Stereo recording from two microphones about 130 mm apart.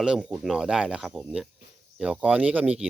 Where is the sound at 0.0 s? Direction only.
5° right (ahead or behind).